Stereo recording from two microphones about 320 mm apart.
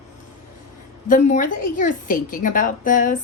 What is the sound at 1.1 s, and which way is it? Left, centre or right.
A woman's voice, left.